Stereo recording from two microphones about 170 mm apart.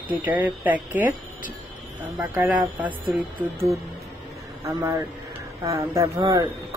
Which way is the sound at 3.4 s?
30° right (ahead or behind).